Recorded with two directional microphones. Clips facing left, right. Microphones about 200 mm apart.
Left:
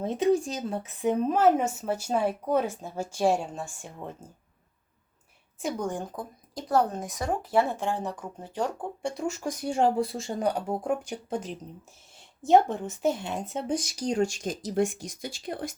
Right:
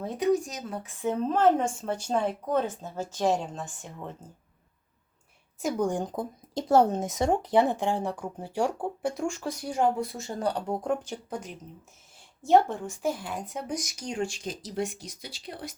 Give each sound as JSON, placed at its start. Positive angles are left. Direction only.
{"t": 0.0, "sound": "speech", "side_deg": 25}
{"t": 5.6, "sound": "speech", "side_deg": -10}
{"t": 9.4, "sound": "speech", "side_deg": 20}
{"t": 10.4, "sound": "speech", "side_deg": 5}
{"t": 11.3, "sound": "speech", "side_deg": 30}
{"t": 12.4, "sound": "speech", "side_deg": 15}